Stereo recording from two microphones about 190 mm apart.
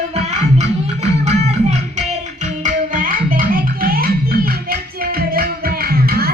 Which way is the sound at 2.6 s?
45° right (ahead or behind).